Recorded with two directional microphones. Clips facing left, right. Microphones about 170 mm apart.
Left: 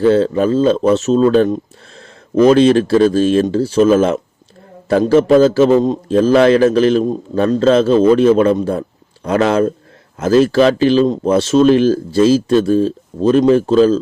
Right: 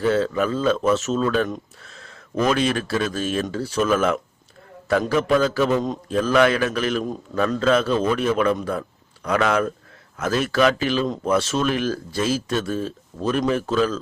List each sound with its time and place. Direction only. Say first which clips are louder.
0.0 s a man's voice: left 8 dB; 30° left (ahead or behind)